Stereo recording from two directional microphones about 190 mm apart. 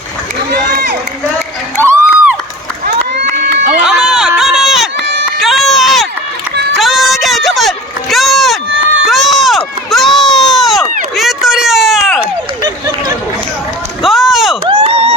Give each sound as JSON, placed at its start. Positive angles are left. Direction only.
{"t": 1.8, "sound": "a sound", "side_deg": -15}
{"t": 3.8, "sound": "run", "side_deg": -5}
{"t": 5.4, "sound": "a sound", "side_deg": 0}
{"t": 8.1, "sound": "rowboat", "side_deg": 0}
{"t": 9.0, "sound": "run", "side_deg": 0}
{"t": 14.0, "sound": "run", "side_deg": 0}
{"t": 14.7, "sound": "crowd", "side_deg": -30}